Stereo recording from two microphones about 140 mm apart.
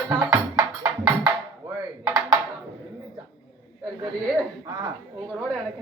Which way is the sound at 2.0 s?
25° right (ahead or behind).